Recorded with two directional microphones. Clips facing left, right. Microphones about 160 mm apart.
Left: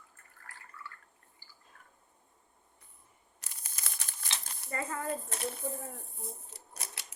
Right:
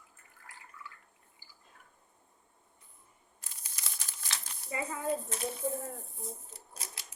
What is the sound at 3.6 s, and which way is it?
Crumpling, 50° left (ahead or behind).